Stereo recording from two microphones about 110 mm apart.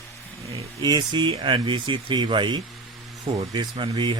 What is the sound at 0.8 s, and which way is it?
Speech, 40° right (ahead or behind).